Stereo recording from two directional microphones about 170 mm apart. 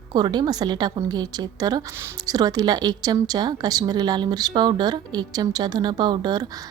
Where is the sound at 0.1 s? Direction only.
25° right (ahead or behind).